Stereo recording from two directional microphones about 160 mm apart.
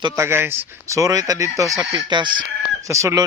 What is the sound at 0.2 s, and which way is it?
Speech, 15° right (ahead or behind).